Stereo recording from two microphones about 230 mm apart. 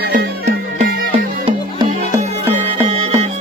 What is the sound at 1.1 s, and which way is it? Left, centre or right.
Music, right.